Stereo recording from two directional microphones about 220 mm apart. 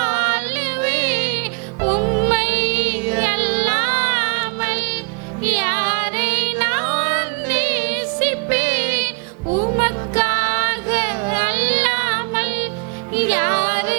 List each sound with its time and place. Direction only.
0.0 s music: 15° right (ahead or behind)
1.8 s music: 25° right (ahead or behind)
2.3 s music: 10° right (ahead or behind)
9.5 s music: 30° right (ahead or behind)
9.7 s music: 15° right (ahead or behind)